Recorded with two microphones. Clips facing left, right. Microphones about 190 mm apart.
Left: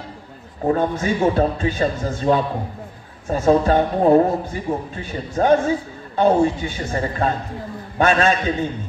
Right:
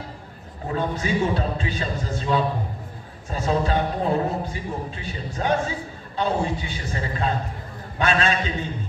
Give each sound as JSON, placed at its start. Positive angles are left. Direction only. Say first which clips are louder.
{"t": 0.7, "sound": "a man's voice", "louder": "left 6 dB", "side_deg": 50}